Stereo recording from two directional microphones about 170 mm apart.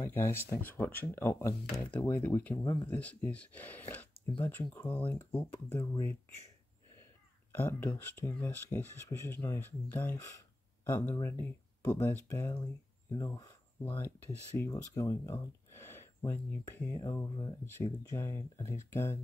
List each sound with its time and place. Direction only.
0.0 s speech: 15° left (ahead or behind)
2.9 s speech: 10° left (ahead or behind)
7.5 s speech: 10° left (ahead or behind)
17.6 s speech: 15° left (ahead or behind)